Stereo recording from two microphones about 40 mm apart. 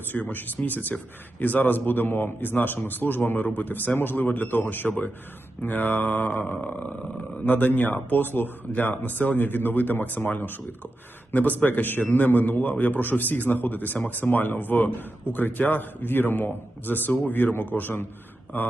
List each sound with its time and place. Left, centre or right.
0.1 s speech: left